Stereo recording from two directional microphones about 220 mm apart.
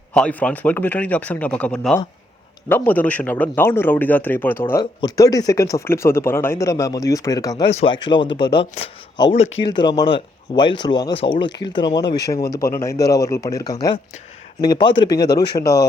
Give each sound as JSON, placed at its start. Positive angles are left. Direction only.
{"t": 0.1, "sound": "speech", "side_deg": 5}
{"t": 12.0, "sound": "speech", "side_deg": 50}
{"t": 12.3, "sound": "speech", "side_deg": 15}